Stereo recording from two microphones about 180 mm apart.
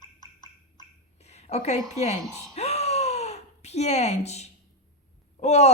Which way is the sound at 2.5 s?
35° left (ahead or behind).